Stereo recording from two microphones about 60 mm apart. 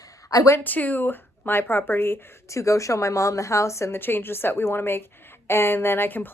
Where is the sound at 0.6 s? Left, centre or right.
Left.